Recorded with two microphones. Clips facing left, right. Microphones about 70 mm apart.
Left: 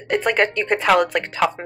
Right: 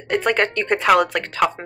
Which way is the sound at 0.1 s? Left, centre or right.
Centre.